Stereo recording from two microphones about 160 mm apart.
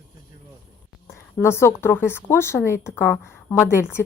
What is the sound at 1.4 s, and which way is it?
A woman's voice, 15° left (ahead or behind).